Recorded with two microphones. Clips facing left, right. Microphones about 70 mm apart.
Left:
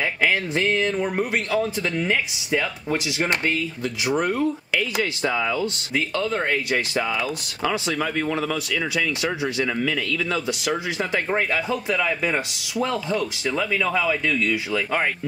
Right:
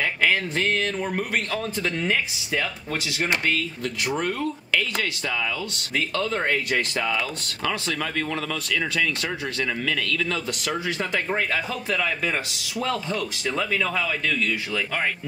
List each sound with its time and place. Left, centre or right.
0.2 s speech: centre
2.9 s speech: left
3.8 s speech: centre; by 5.7 s left
5.9 s speech: centre
13.5 s speech: centre